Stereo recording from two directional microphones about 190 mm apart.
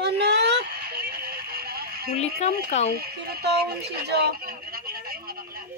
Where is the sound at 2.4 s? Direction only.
35° left (ahead or behind).